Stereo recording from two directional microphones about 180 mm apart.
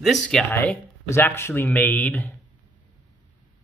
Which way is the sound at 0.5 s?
10° left (ahead or behind).